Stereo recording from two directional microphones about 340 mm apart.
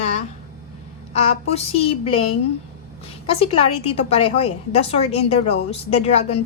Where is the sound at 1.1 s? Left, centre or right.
Centre.